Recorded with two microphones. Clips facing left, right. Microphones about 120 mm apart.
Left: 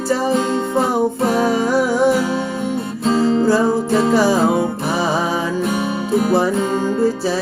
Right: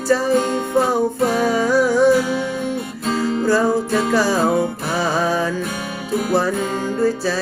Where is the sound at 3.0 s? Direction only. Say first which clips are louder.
Left 5 dB; 30° left (ahead or behind).